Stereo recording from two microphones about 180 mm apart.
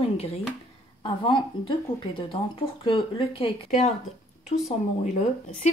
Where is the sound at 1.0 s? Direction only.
25° left (ahead or behind).